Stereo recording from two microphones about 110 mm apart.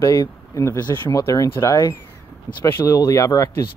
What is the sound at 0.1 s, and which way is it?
Speech, 25° left (ahead or behind).